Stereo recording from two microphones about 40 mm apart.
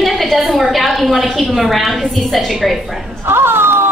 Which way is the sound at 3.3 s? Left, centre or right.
Right.